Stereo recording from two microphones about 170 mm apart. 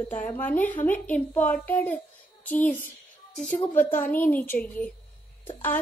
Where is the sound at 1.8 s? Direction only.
10° left (ahead or behind).